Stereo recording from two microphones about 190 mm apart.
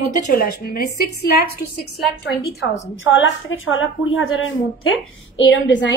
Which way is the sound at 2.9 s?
80° left.